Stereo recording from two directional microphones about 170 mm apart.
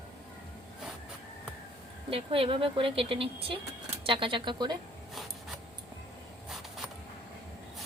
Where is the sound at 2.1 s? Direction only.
35° right (ahead or behind).